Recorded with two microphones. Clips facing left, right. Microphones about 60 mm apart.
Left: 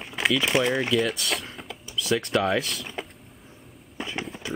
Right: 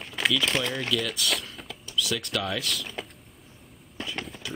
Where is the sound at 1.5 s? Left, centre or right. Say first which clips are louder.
Left 2 dB; centre.